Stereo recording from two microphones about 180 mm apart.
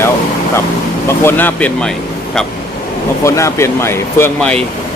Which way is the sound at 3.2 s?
15° left (ahead or behind).